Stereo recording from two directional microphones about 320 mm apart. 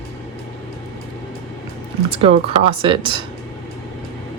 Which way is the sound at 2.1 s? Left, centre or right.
Centre.